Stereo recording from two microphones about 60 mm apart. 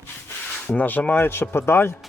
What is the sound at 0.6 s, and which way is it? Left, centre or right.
Speech, left.